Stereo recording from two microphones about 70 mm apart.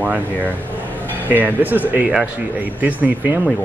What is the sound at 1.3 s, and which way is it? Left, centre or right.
Speech, right.